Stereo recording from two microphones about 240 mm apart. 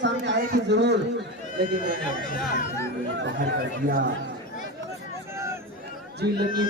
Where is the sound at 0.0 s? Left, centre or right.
Right.